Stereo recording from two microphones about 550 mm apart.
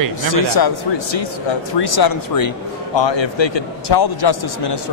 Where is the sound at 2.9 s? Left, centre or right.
Left.